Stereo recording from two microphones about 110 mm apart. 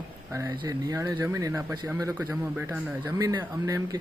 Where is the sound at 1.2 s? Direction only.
25° right (ahead or behind).